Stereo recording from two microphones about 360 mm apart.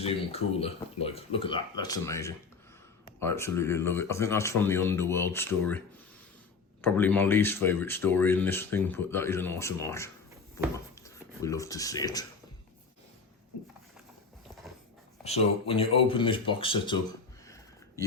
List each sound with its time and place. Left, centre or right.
0.0 s speech: centre
6.8 s speech: centre
15.2 s speech: centre
17.4 s a sound: centre